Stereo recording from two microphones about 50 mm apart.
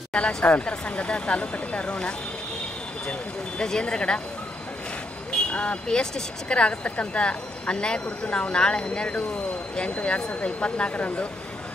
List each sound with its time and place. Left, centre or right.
0.1 s speech: left
5.5 s speech: left